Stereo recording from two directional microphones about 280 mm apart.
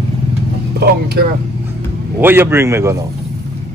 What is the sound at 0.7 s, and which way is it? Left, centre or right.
Speech, right.